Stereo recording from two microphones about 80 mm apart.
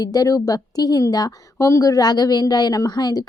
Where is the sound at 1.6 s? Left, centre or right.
Left.